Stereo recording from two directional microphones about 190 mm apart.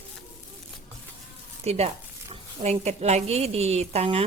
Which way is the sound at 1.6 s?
35° right (ahead or behind).